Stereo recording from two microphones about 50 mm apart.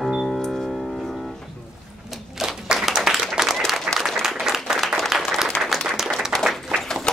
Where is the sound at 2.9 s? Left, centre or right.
Centre.